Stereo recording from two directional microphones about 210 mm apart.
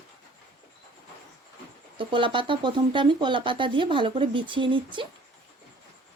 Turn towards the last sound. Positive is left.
turn(degrees=-25)  # may be behind; listen again after turning